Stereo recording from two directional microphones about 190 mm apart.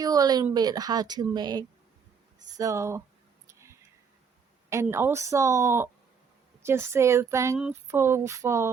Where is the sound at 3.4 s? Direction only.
15° right (ahead or behind).